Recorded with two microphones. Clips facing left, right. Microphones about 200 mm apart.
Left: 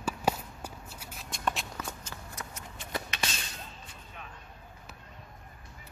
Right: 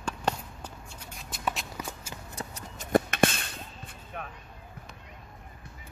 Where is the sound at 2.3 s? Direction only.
35° right (ahead or behind).